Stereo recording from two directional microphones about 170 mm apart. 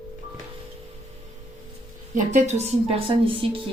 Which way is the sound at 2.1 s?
45° right (ahead or behind).